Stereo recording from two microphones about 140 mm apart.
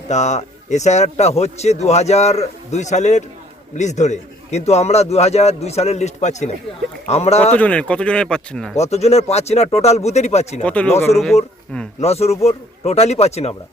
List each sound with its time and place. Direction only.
0.1 s a man's voice: 55° left (ahead or behind)
7.5 s speech: 10° left (ahead or behind)
8.7 s a man's voice: 50° left (ahead or behind)
10.6 s speech: 10° left (ahead or behind)
11.9 s a man's voice: 50° left (ahead or behind)